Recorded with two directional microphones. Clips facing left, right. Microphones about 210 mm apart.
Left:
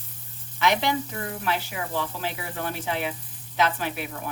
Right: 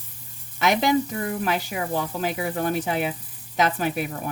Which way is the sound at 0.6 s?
45° right (ahead or behind).